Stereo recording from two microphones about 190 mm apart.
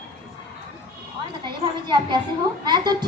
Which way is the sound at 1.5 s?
25° right (ahead or behind).